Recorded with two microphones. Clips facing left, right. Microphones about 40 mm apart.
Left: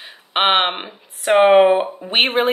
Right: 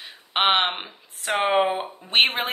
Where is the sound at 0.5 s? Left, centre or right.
Left; by 2.3 s centre.